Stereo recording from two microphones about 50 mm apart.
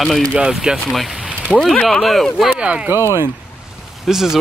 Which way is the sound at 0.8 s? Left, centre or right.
Centre.